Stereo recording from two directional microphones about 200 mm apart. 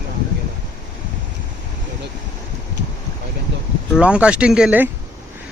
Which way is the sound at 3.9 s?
5° right (ahead or behind).